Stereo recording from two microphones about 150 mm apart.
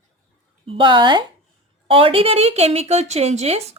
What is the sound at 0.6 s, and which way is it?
A woman's voice, 35° right (ahead or behind).